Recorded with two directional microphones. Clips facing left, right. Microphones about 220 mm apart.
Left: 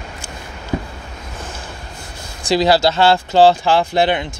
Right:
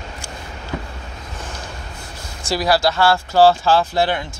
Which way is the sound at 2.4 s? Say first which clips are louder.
Left 4 dB; 25° left (ahead or behind).